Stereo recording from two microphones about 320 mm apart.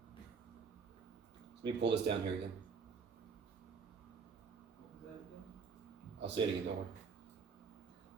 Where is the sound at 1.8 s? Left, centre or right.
Right.